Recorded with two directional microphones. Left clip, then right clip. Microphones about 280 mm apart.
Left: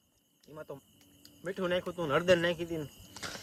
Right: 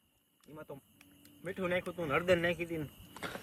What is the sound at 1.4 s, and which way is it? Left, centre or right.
Speech, centre.